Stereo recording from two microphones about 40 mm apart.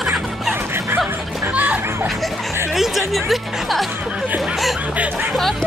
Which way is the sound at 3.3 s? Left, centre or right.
Centre.